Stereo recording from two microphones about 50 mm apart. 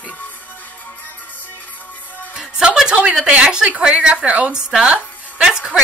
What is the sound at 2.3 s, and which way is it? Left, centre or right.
Music, centre.